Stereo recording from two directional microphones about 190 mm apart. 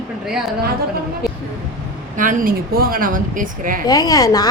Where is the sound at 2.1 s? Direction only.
45° right (ahead or behind).